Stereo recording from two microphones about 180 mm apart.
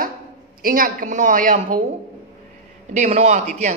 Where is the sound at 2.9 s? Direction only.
35° right (ahead or behind).